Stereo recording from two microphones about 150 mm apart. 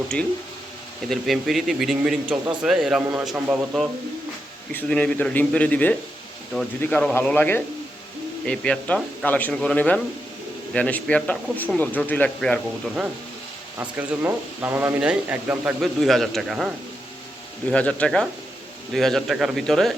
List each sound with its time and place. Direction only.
1.1 s speech: centre (ahead or behind)
4.7 s speech: 10° left (ahead or behind)
13.7 s speech: 15° right (ahead or behind)
15.8 s speech: centre (ahead or behind)